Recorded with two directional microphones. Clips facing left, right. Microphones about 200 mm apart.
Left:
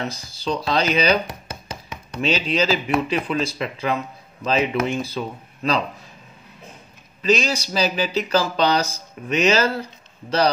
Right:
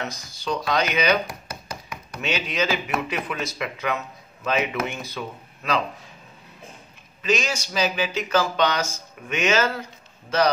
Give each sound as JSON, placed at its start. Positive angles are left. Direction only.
{"t": 0.0, "sound": "speech", "side_deg": 30}
{"t": 7.2, "sound": "speech", "side_deg": 35}